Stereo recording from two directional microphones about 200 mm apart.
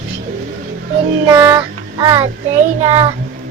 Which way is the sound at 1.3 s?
15° right (ahead or behind).